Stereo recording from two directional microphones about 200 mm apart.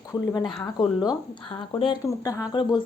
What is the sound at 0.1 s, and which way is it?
Speech, 15° left (ahead or behind).